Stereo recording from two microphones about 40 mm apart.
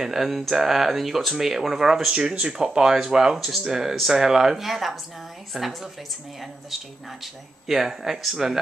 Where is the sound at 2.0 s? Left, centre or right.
Right.